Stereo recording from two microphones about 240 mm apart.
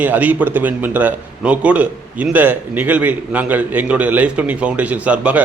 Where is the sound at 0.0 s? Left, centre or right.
Centre.